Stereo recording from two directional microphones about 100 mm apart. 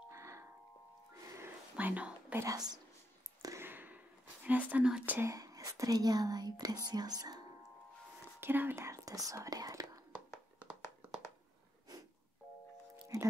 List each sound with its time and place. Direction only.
0.1 s music: 30° right (ahead or behind)
1.8 s whispering: 15° right (ahead or behind)
2.3 s speech: 35° right (ahead or behind)
3.4 s whispering: 25° right (ahead or behind)
5.2 s whispering: 35° right (ahead or behind)
5.9 s speech: 40° right (ahead or behind)
8.4 s speech: 20° right (ahead or behind)
13.1 s speech: 30° right (ahead or behind)